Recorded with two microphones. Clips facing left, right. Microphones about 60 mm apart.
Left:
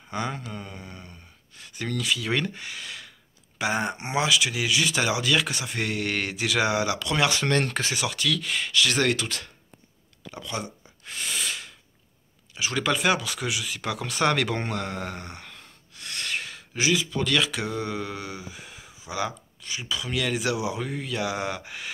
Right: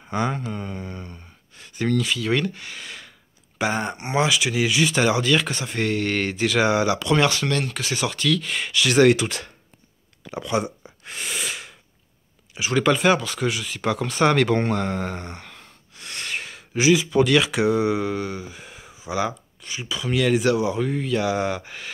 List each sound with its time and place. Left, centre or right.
0.1 s speech: centre
2.7 s a sound: centre
3.6 s speech: centre
7.2 s speech: left
7.9 s speech: centre
10.3 s a sound: right
12.5 s speech: centre